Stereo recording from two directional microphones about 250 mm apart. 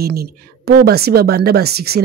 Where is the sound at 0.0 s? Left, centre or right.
Right.